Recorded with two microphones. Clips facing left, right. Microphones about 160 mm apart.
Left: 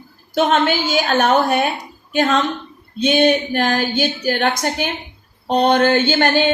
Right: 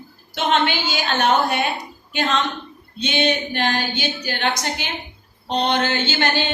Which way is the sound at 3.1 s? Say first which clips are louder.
Left 6 dB; 50° left (ahead or behind).